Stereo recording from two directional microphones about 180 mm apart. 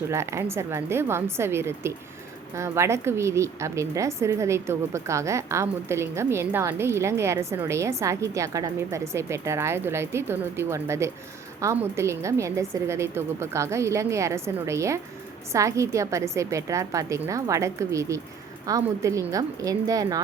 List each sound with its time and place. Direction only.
0.1 s a woman's voice: 15° right (ahead or behind)